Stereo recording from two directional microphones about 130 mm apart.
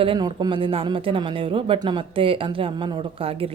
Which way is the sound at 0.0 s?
40° right (ahead or behind).